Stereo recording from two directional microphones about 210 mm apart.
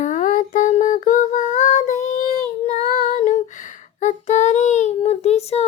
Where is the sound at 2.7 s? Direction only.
35° left (ahead or behind).